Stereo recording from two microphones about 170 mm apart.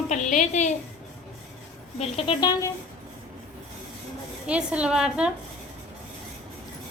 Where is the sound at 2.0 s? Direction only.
35° left (ahead or behind).